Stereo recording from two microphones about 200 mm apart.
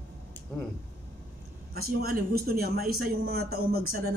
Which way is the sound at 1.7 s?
50° right (ahead or behind).